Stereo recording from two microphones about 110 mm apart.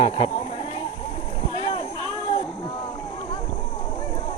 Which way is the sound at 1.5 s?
55° left (ahead or behind).